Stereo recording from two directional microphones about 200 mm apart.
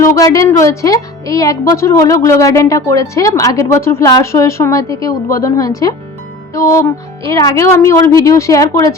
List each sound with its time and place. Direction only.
0.0 s speech: 15° left (ahead or behind)